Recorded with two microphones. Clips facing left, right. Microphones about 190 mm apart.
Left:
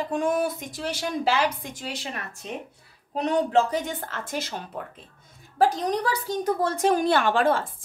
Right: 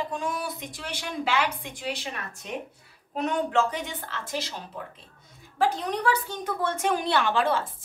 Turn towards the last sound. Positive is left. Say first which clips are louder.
# left 3 dB
turn(degrees=50)  # may be behind; listen again after turning